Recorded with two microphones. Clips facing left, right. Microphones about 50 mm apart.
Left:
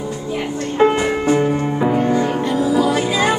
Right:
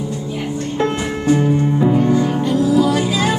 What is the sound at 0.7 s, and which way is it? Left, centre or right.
Music, centre.